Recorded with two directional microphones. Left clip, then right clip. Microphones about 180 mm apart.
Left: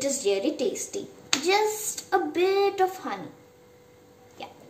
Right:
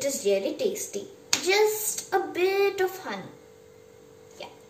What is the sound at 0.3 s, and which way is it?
Dishes, 60° left (ahead or behind).